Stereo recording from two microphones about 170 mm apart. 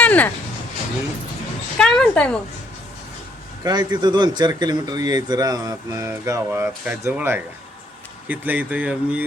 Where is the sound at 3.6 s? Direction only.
25° right (ahead or behind).